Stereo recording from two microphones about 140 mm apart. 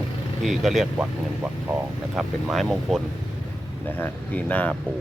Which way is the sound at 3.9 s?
10° left (ahead or behind).